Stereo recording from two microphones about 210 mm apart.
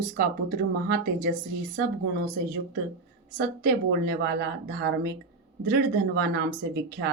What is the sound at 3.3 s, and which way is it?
A woman's voice, 45° right (ahead or behind).